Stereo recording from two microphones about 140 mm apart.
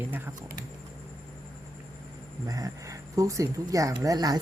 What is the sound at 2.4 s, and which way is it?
Speech, 25° right (ahead or behind).